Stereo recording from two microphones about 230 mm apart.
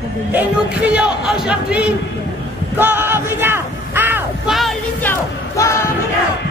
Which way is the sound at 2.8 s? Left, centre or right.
Centre.